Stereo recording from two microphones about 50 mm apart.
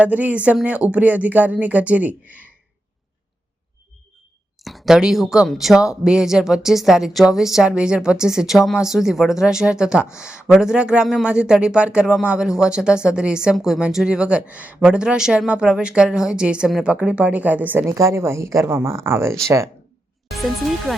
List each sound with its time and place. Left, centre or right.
0.0 s speech: right
4.6 s a sound: centre
4.9 s speech: centre
7.8 s speech: centre
14.8 s speech: centre; by 17.7 s right
17.8 s a woman's voice: right
18.6 s speech: right
19.5 s speech: right
20.3 s speech: centre